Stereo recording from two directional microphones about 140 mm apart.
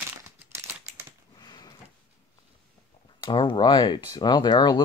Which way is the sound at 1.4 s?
30° left (ahead or behind).